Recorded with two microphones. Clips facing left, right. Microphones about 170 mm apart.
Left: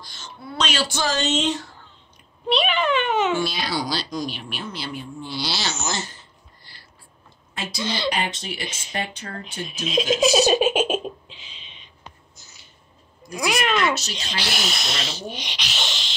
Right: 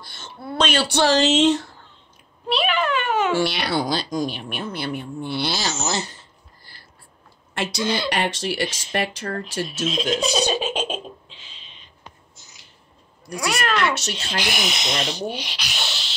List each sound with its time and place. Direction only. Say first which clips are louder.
0.0 s speech: right 3 dB; 60° right (ahead or behind); by 1.4 s 80° right
2.4 s a child's voice: left 1 dB; 5° right (ahead or behind)
3.3 s speech: right 3 dB; 75° right (ahead or behind); by 6.0 s 40° right (ahead or behind)
7.5 s a woman's voice: right 5 dB; 75° right (ahead or behind)
7.8 s speech: right 2 dB; 10° right (ahead or behind)
8.1 s speech: right 3 dB; 75° right (ahead or behind)
9.7 s a child's voice: left 4 dB; centre (ahead or behind)
10.5 s giggle: left 5 dB; 15° left (ahead or behind)
13.4 s giggle: left 1 dB; 10° left (ahead or behind)
14.4 s speech: right 2 dB; 15° right (ahead or behind)